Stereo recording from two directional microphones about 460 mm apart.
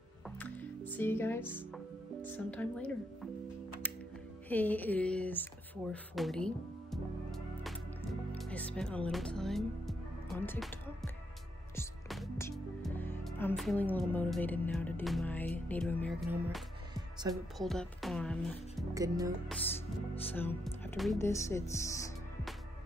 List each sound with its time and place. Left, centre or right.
0.4 s music: centre
2.2 s speech: centre
4.5 s a sound: centre
11.7 s speech: centre
20.3 s speech: centre